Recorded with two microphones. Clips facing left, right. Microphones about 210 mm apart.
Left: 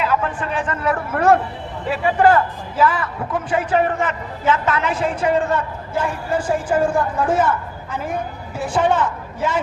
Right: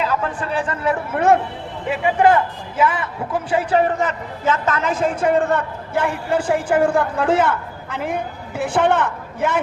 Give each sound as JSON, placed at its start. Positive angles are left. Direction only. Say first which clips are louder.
{"t": 0.0, "sound": "a man's voice", "louder": "left 1 dB", "side_deg": -35}